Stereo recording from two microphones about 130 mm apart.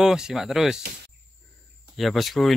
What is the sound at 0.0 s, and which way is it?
Speech, 5° right (ahead or behind).